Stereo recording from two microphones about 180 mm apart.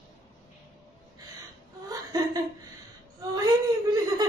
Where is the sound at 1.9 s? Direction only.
20° right (ahead or behind).